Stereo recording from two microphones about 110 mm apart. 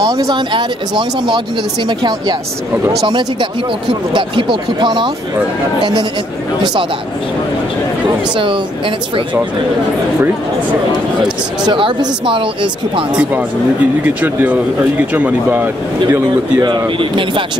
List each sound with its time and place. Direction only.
0.0 s speech: 35° right (ahead or behind)
6.6 s speech: 40° right (ahead or behind)
8.4 s speech: 50° right (ahead or behind)
11.6 s speech: 45° right (ahead or behind)
13.1 s speech: 15° right (ahead or behind)
16.6 s speech: 45° right (ahead or behind)